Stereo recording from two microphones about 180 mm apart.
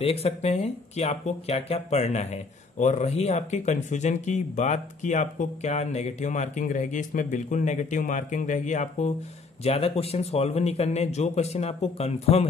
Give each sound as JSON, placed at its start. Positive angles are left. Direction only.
{"t": 0.0, "sound": "speech", "side_deg": 35}